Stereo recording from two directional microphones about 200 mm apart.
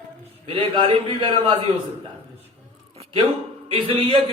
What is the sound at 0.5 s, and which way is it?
A man's voice, 25° right (ahead or behind).